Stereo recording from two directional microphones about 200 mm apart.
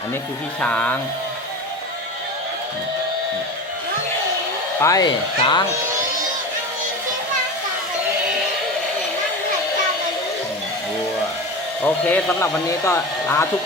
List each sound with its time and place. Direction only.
0.6 s speech: 5° left (ahead or behind)
4.8 s speech: 15° left (ahead or behind)
11.8 s speech: 5° left (ahead or behind)